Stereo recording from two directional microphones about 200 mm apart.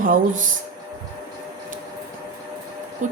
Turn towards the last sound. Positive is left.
turn(degrees=-40)  # may be behind; listen again after turning